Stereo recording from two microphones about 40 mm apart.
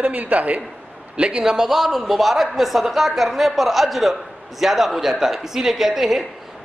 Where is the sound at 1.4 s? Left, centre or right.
Centre.